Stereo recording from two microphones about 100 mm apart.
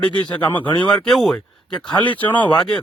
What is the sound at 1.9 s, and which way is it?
Speech, 50° left (ahead or behind).